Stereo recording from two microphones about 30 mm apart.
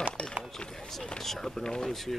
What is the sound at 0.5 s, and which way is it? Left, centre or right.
Speech, left.